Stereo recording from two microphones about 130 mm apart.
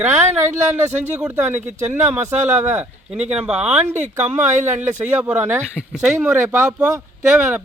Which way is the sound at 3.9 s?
65° right (ahead or behind).